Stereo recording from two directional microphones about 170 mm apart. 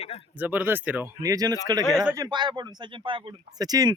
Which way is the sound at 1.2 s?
20° right (ahead or behind).